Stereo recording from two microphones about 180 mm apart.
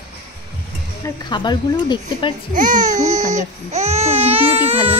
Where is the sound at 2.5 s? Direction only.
45° right (ahead or behind).